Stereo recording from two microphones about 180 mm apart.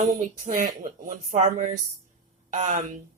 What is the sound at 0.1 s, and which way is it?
Speech, 40° right (ahead or behind).